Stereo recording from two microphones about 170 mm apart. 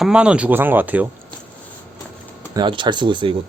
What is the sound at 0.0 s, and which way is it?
Speech, 5° right (ahead or behind).